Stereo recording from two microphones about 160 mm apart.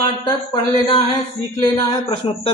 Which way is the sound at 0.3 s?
35° left (ahead or behind).